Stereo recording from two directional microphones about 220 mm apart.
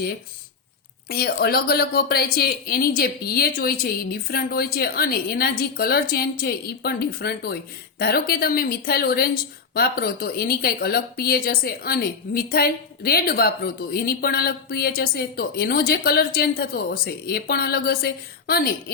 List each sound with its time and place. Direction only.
1.0 s a woman's voice: 45° left (ahead or behind)